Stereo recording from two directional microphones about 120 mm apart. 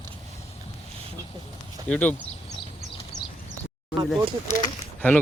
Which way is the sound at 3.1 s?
25° right (ahead or behind).